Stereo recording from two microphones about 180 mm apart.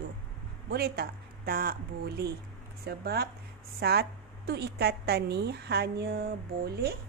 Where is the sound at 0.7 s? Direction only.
60° right (ahead or behind).